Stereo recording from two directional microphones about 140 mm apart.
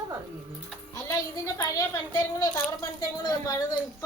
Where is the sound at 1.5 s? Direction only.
20° left (ahead or behind).